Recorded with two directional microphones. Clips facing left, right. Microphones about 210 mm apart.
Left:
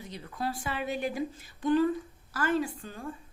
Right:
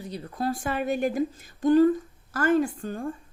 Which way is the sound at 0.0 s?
35° right (ahead or behind).